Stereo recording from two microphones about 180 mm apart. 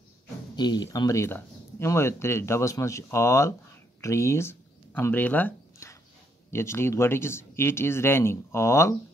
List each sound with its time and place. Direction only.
0.6 s speech: 25° left (ahead or behind)